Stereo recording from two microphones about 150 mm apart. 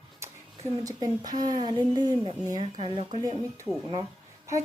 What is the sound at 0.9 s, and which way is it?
A woman's voice, 25° right (ahead or behind).